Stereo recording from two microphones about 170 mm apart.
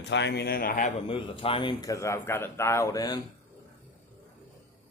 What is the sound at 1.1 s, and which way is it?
Speech, 30° left (ahead or behind).